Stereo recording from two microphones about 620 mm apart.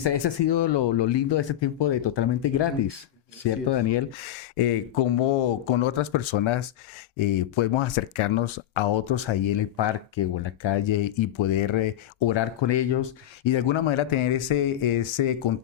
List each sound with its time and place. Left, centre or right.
0.0 s speech: left
4.5 s speech: left